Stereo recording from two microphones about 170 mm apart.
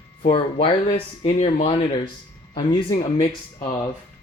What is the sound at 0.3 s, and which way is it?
Speech, 30° left (ahead or behind).